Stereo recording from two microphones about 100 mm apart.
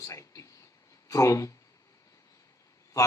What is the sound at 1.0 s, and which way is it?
Speech, 35° left (ahead or behind).